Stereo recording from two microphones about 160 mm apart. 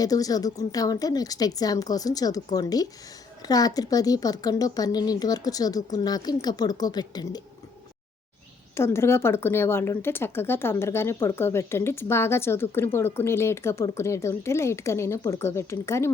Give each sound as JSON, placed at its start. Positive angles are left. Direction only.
{"t": 0.0, "sound": "a woman's voice", "side_deg": 20}
{"t": 8.7, "sound": "speech", "side_deg": 15}